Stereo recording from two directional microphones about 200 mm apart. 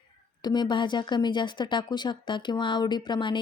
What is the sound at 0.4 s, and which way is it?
Speech, 20° left (ahead or behind).